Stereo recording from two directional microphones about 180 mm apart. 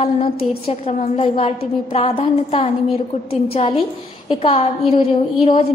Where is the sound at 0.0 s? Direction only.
35° left (ahead or behind).